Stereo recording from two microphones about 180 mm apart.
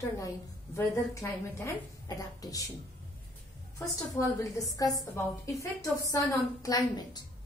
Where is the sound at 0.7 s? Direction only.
15° left (ahead or behind).